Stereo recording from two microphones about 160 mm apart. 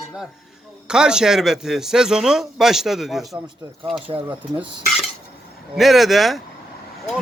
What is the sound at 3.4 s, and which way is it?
Speech, 30° right (ahead or behind).